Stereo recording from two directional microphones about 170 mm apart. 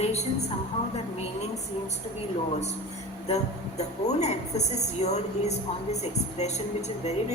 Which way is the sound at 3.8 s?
40° left (ahead or behind).